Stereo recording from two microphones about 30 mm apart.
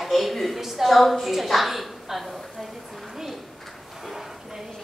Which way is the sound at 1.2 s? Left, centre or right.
Centre.